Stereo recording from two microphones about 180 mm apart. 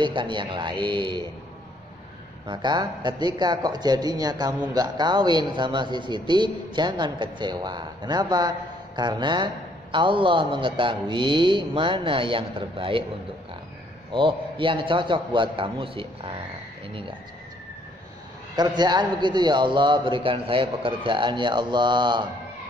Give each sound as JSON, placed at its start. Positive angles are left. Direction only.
{"t": 0.0, "sound": "a man's voice", "side_deg": -25}
{"t": 2.4, "sound": "a man's voice", "side_deg": -25}
{"t": 14.1, "sound": "a man's voice", "side_deg": -30}
{"t": 18.6, "sound": "a man's voice", "side_deg": -25}